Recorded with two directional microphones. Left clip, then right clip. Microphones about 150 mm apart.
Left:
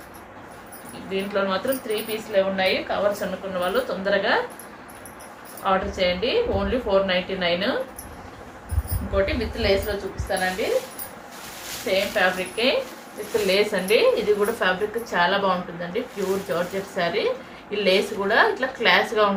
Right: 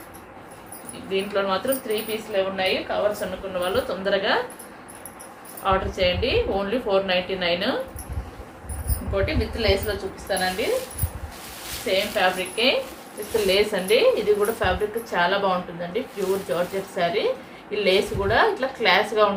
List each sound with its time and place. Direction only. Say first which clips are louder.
1.1 s speech: right 1 dB; 15° right (ahead or behind)
5.6 s speech: even; 15° right (ahead or behind)
9.1 s speech: left 1 dB; 15° right (ahead or behind)
11.9 s a woman's voice: even; 15° right (ahead or behind)